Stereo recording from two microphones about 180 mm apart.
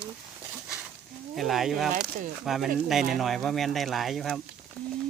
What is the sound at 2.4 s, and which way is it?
Speech, centre (ahead or behind).